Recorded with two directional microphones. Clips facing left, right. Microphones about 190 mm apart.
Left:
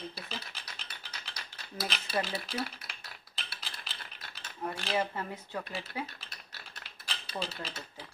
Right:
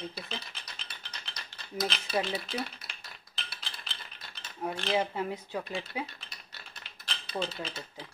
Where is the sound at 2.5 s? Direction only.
5° left (ahead or behind).